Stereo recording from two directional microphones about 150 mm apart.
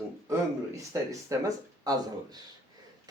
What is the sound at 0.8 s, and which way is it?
Speech, 20° right (ahead or behind).